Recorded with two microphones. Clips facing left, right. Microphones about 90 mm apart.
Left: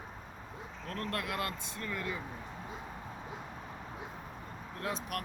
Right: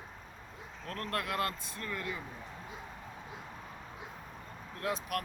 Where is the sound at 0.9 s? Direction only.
25° left (ahead or behind).